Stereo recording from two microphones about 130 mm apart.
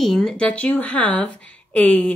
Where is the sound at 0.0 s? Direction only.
5° left (ahead or behind).